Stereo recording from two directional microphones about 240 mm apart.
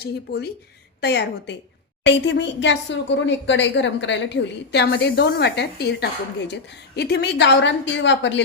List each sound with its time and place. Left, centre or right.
0.0 s a woman's voice: left